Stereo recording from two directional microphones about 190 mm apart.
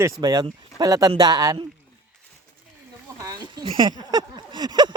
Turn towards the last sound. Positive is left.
turn(degrees=-25)  # may be behind; listen again after turning